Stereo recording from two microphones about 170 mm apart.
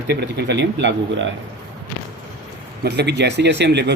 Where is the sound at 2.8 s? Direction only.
80° right.